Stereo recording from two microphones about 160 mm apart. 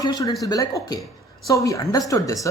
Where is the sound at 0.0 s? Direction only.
25° left (ahead or behind).